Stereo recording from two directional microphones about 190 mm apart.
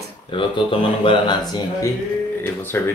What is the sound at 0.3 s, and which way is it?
Speech, 25° left (ahead or behind).